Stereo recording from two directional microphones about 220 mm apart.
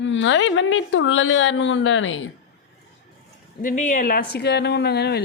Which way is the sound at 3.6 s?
35° left (ahead or behind).